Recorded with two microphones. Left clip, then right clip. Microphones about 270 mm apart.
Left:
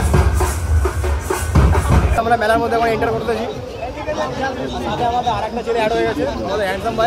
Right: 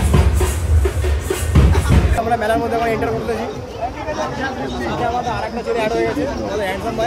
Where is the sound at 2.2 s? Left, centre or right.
Left.